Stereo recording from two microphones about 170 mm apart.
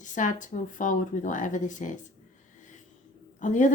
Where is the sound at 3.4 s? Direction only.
45° left (ahead or behind).